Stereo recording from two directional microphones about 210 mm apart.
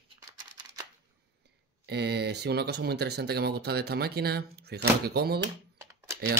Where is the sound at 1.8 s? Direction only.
50° right (ahead or behind).